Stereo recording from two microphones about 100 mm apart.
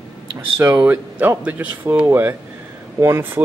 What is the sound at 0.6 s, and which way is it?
Speech, 35° right (ahead or behind).